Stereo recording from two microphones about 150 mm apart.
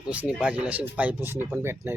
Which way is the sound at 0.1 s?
10° right (ahead or behind).